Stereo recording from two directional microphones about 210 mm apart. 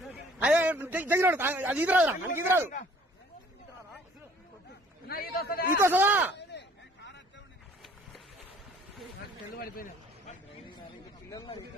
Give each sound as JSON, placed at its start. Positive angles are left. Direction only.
{"t": 0.1, "sound": "a man's voice", "side_deg": -5}
{"t": 5.0, "sound": "a man's voice", "side_deg": 45}
{"t": 5.7, "sound": "speech", "side_deg": -10}
{"t": 6.3, "sound": "a sound", "side_deg": 55}
{"t": 9.6, "sound": "a sound", "side_deg": 40}
{"t": 11.2, "sound": "speech", "side_deg": 15}